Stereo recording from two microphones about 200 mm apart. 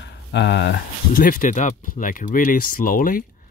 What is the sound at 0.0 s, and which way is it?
Speech, 60° left (ahead or behind).